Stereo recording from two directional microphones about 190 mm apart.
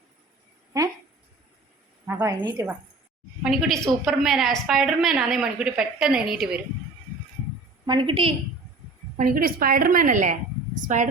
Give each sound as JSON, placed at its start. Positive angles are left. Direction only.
{"t": 2.0, "sound": "a woman's voice", "side_deg": -10}
{"t": 2.4, "sound": "a woman's voice", "side_deg": -25}
{"t": 3.4, "sound": "a woman's voice", "side_deg": 0}
{"t": 7.9, "sound": "a woman's voice", "side_deg": -25}
{"t": 9.1, "sound": "a woman's voice", "side_deg": -45}